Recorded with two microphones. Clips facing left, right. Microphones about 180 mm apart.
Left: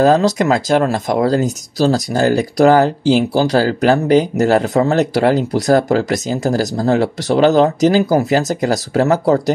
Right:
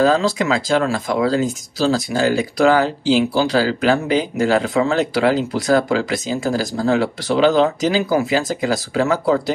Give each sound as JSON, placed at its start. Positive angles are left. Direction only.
{"t": 0.0, "sound": "speech", "side_deg": 45}